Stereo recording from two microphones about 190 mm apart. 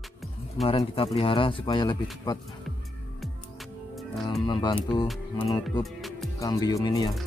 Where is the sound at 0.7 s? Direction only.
30° left (ahead or behind).